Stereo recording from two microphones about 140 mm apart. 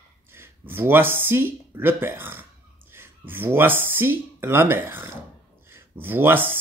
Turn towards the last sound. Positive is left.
turn(degrees=-15)  # may be behind; listen again after turning